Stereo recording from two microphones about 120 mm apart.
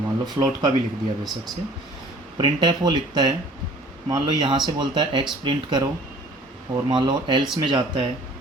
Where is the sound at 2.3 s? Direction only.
35° right (ahead or behind).